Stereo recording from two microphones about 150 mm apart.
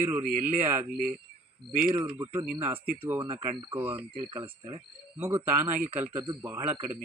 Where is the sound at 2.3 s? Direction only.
10° right (ahead or behind).